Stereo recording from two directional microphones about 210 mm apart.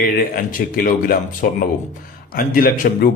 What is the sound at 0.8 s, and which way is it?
Speech, 45° left (ahead or behind).